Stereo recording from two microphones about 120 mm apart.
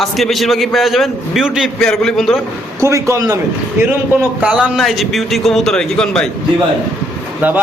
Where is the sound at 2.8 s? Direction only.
25° right (ahead or behind).